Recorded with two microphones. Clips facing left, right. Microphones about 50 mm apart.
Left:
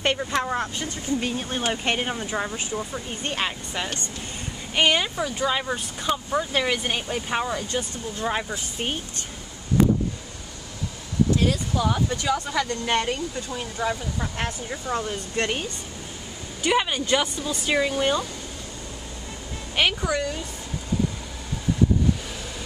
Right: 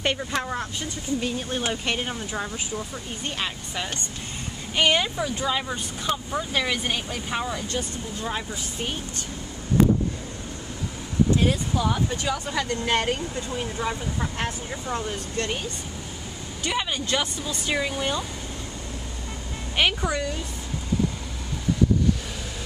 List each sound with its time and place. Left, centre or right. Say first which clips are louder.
0.0 s speech: left 2 dB; centre
1.2 s speech: left 1 dB; centre
3.3 s speech: left 3 dB; left
4.8 s speech: even; centre
7.7 s speech: left 1 dB; left
11.3 s speech: even; centre
11.8 s speech: left 3 dB; centre
13.0 s speech: right 1 dB; right
13.7 s speech: left 5 dB; centre
16.6 s speech: left 5 dB; centre
19.8 s speech: even; centre